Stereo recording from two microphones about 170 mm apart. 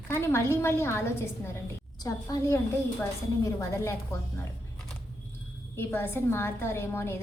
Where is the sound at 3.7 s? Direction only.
15° left (ahead or behind).